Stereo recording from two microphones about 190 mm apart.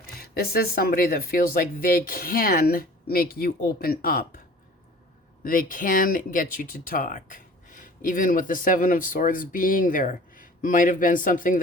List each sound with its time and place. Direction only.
0.2 s speech: 55° left (ahead or behind)
5.4 s speech: 45° left (ahead or behind)